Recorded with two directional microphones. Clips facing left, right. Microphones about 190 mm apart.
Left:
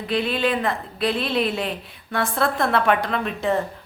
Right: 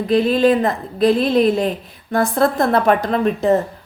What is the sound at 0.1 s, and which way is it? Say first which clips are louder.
A woman's voice: right 8 dB; 40° right (ahead or behind).